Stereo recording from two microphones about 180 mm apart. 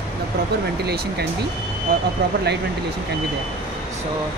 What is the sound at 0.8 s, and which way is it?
Speech, 65° right (ahead or behind).